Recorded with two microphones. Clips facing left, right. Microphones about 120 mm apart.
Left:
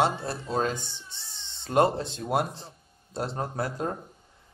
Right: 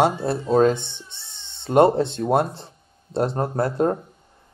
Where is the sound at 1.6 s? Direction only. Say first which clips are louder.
Right 7 dB; 25° right (ahead or behind).